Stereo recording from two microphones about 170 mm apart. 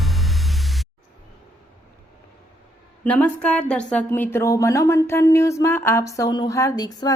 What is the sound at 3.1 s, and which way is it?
A woman's voice, 10° left (ahead or behind).